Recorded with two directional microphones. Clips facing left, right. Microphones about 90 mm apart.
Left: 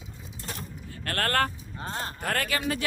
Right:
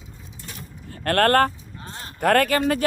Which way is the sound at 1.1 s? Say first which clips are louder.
Right 9 dB; 50° right (ahead or behind).